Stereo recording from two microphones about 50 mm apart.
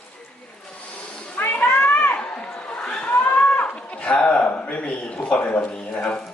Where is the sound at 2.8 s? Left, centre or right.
Centre.